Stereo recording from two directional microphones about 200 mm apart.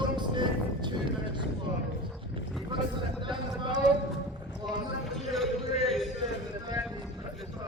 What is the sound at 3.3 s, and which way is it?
Speech, 25° right (ahead or behind).